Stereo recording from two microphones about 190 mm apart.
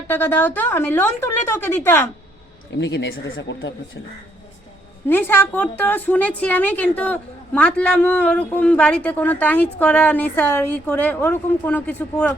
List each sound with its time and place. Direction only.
0.1 s a woman's voice: 10° left (ahead or behind)
2.8 s speech: 70° left (ahead or behind)
5.0 s a woman's voice: 10° left (ahead or behind)